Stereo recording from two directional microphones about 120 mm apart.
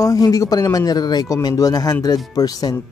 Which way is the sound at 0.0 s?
30° left (ahead or behind).